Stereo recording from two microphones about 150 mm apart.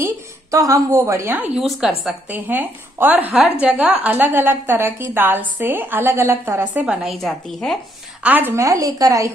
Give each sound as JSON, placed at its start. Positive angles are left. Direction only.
{"t": 0.0, "sound": "a woman's voice", "side_deg": -20}
{"t": 1.5, "sound": "a woman's voice", "side_deg": -5}
{"t": 8.2, "sound": "a woman's voice", "side_deg": -10}